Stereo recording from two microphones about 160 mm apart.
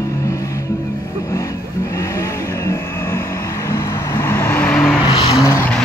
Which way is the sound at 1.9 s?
20° left (ahead or behind).